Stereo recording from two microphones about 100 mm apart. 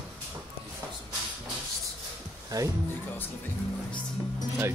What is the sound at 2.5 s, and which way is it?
Speech, 35° right (ahead or behind).